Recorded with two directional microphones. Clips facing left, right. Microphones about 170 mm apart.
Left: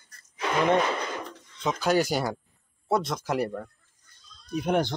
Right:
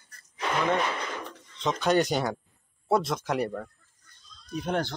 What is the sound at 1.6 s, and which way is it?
Speech, 5° left (ahead or behind).